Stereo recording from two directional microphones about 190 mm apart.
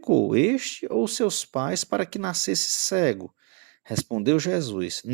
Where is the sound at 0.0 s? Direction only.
35° right (ahead or behind).